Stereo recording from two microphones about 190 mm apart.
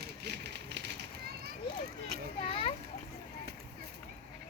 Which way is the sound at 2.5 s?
30° left (ahead or behind).